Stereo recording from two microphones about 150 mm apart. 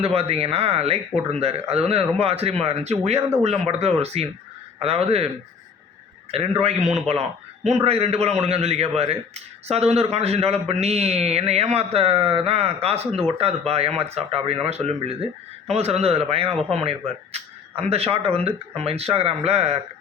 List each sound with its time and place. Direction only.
0.0 s a man's voice: 40° right (ahead or behind)
6.3 s a man's voice: 40° right (ahead or behind)